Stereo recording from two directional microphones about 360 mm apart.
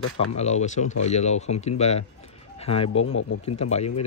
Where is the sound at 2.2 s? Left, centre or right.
Centre.